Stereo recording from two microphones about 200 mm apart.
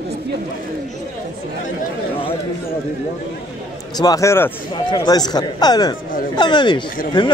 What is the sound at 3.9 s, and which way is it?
A man's voice, 15° left (ahead or behind).